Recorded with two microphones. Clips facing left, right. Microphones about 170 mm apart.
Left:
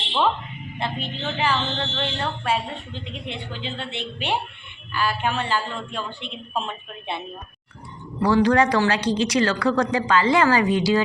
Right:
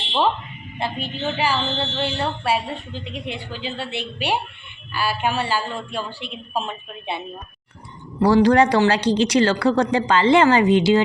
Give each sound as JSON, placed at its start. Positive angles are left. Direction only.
{"t": 0.8, "sound": "a woman's voice", "side_deg": -10}
{"t": 8.2, "sound": "speech", "side_deg": -35}